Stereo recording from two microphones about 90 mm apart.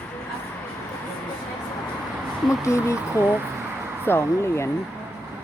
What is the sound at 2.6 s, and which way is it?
Speech, 35° left (ahead or behind).